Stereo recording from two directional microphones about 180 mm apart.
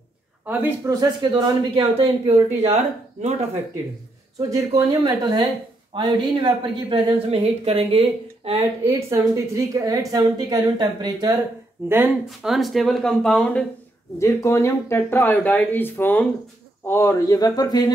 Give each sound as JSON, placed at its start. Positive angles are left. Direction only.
{"t": 0.5, "sound": "a woman's voice", "side_deg": -10}
{"t": 4.4, "sound": "a woman's voice", "side_deg": -20}
{"t": 8.8, "sound": "a woman's voice", "side_deg": -20}
{"t": 12.3, "sound": "speech", "side_deg": 0}
{"t": 14.2, "sound": "speech", "side_deg": 15}